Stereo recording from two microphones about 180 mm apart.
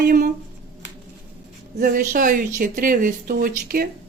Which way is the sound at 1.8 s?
50° right (ahead or behind).